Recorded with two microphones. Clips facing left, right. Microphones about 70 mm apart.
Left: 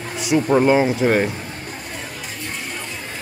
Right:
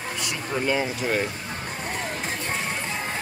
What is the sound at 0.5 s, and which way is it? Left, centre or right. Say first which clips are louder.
Speech: left 9 dB; left.